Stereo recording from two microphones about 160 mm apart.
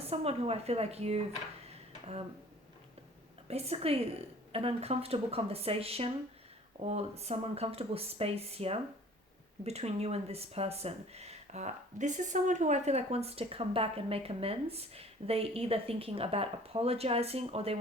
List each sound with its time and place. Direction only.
0.1 s speech: 40° right (ahead or behind)
3.5 s speech: 40° right (ahead or behind)